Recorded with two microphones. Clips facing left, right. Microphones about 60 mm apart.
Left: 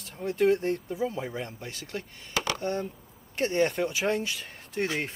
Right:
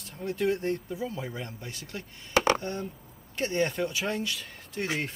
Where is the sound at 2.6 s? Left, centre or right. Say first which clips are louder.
Left 4 dB; left.